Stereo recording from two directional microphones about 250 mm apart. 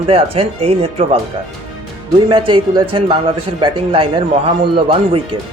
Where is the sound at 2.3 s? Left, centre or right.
Centre.